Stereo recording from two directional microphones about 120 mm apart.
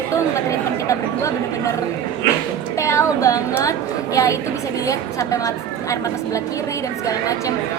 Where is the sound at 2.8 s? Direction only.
25° left (ahead or behind).